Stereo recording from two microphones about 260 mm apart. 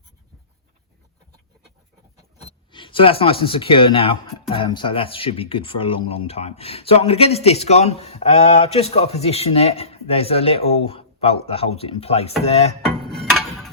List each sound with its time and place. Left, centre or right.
2.4 s speech: left
13.1 s music: centre